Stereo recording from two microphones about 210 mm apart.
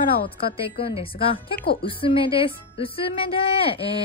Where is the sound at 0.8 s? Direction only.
25° left (ahead or behind).